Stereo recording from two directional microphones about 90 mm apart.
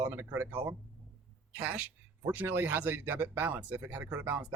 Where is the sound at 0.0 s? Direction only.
25° right (ahead or behind).